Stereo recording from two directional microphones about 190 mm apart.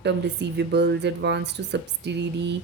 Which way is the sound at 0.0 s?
65° right (ahead or behind).